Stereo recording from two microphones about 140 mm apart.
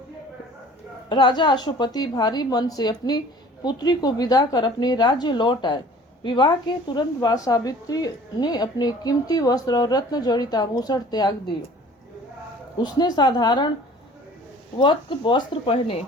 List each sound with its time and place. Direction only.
1.1 s a woman's voice: 35° left (ahead or behind)
12.8 s a woman's voice: 30° left (ahead or behind)
14.8 s a woman's voice: 35° left (ahead or behind)